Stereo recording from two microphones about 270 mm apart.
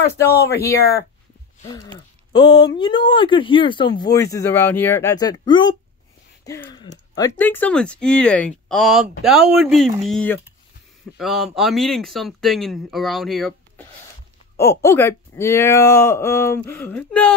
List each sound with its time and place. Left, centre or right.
0.0 s speech: left
2.3 s speech: centre